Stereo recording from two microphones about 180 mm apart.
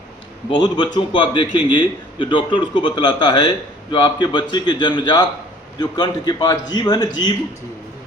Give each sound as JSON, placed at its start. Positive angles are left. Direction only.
{"t": 0.5, "sound": "a man's voice", "side_deg": 25}